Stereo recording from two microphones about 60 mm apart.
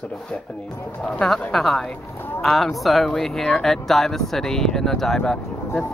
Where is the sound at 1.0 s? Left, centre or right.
Centre.